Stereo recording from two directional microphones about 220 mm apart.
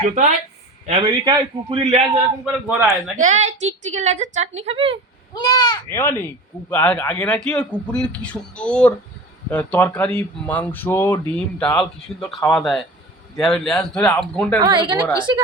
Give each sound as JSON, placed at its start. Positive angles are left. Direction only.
{"t": 0.9, "sound": "a man's voice", "side_deg": -20}
{"t": 2.4, "sound": "a man's voice", "side_deg": -5}
{"t": 3.2, "sound": "a woman's voice", "side_deg": -35}
{"t": 5.3, "sound": "a man's voice", "side_deg": 15}
{"t": 14.6, "sound": "a man's voice", "side_deg": -20}